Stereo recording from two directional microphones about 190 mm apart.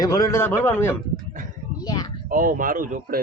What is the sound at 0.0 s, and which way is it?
A man's voice, 20° left (ahead or behind).